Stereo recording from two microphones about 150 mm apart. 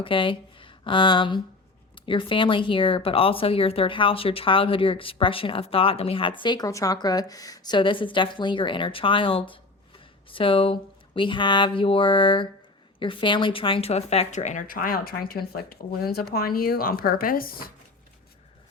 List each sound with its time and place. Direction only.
0.0 s speech: 35° left (ahead or behind); by 17.7 s 80° left